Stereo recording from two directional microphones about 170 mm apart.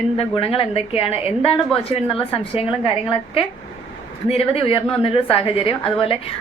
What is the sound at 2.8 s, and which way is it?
A woman's voice, 30° left (ahead or behind).